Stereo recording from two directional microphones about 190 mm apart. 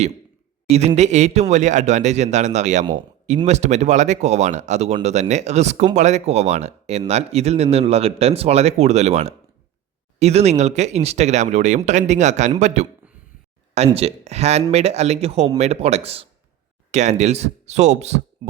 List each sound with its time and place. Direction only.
0.7 s speech: 35° right (ahead or behind)